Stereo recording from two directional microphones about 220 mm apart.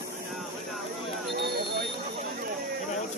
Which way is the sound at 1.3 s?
50° right (ahead or behind).